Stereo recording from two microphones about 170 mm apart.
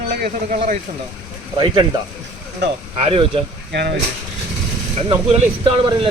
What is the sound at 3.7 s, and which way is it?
Speech, 75° right (ahead or behind).